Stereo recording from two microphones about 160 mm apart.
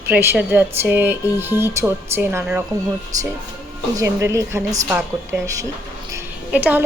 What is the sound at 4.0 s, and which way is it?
Speech, 20° right (ahead or behind).